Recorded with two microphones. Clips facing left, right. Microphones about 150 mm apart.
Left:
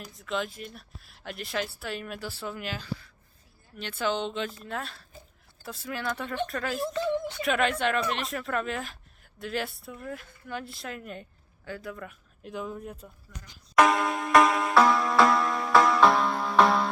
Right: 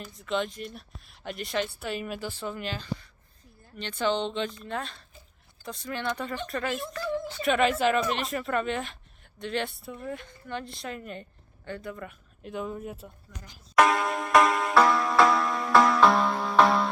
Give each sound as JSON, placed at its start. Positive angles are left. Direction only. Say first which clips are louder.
{"t": 0.1, "sound": "speech", "louder": "right 2 dB", "side_deg": 0}
{"t": 6.9, "sound": "a sound", "louder": "left 3 dB", "side_deg": 20}
{"t": 7.3, "sound": "speech", "louder": "right 2 dB", "side_deg": 0}
{"t": 13.7, "sound": "music", "louder": "even", "side_deg": 0}